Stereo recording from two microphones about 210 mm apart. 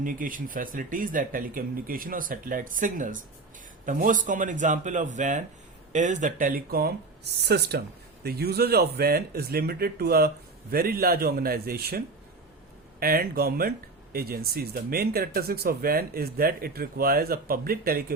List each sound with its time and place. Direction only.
0.0 s speech: 40° right (ahead or behind)